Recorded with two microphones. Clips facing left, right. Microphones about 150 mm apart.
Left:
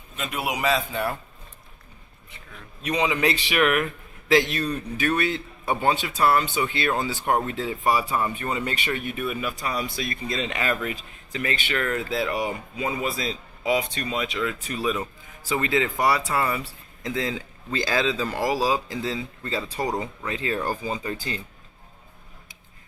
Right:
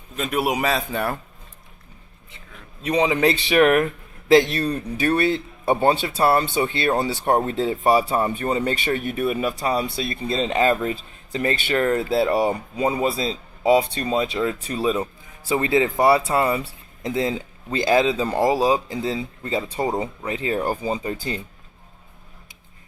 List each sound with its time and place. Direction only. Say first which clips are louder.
0.3 s a man's voice: right 3 dB; 45° right (ahead or behind)
2.8 s a man's voice: right 5 dB; 35° right (ahead or behind)